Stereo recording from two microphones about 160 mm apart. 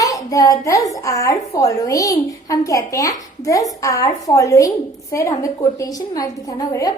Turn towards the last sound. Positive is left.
turn(degrees=20)  # may be behind; listen again after turning